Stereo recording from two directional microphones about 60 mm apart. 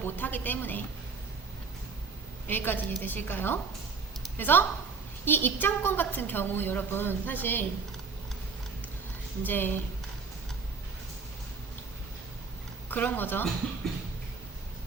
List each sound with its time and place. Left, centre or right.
0.0 s a woman's voice: left
2.5 s a woman's voice: left
9.4 s a woman's voice: left
12.9 s a woman's voice: left